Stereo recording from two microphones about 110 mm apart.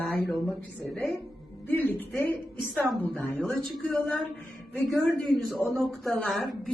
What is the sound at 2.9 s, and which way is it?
Speech, 15° left (ahead or behind).